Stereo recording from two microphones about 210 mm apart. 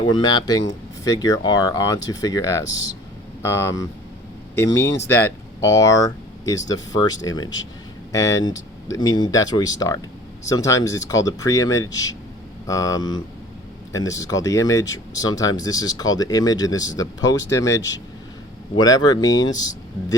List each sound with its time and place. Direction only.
0.0 s speech: 20° left (ahead or behind)